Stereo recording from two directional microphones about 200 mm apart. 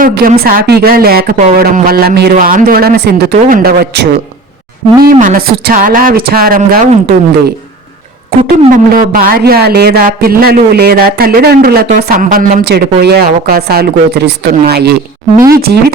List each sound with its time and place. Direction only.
0.0 s speech: 45° right (ahead or behind)
5.2 s speech: 45° right (ahead or behind)
8.4 s speech: 40° right (ahead or behind)